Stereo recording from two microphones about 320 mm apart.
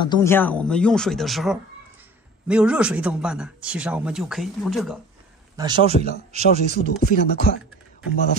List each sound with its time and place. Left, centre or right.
0.0 s a man's voice: centre
5.6 s speech: centre
7.0 s speech: left